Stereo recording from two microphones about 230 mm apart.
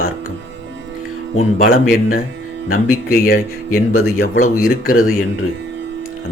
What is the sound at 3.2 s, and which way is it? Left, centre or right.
Speech, left.